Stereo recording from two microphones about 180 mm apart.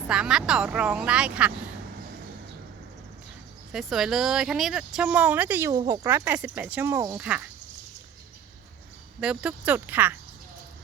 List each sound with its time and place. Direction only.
0.1 s speech: 5° right (ahead or behind)
3.7 s speech: centre (ahead or behind)
9.2 s speech: 5° right (ahead or behind)